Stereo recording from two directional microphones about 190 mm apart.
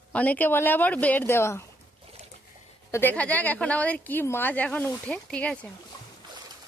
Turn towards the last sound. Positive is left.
turn(degrees=5)  # may be behind; listen again after turning